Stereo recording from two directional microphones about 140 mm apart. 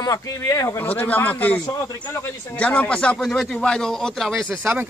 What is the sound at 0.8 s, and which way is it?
Speech, 10° left (ahead or behind).